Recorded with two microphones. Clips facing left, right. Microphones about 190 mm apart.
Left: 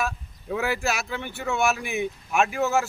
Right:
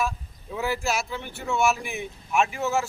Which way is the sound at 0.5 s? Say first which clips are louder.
Left 1 dB; 70° left (ahead or behind).